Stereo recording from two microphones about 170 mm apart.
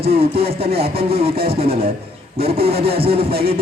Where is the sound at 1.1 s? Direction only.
35° right (ahead or behind).